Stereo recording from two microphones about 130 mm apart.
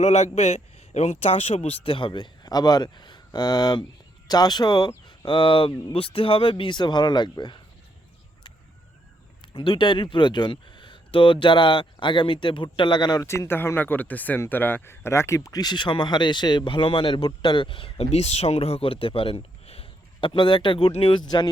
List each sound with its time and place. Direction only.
0.0 s a man's voice: 55° left (ahead or behind); by 7.6 s 35° left (ahead or behind)
9.4 s speech: 40° left (ahead or behind)
13.2 s speech: 20° left (ahead or behind)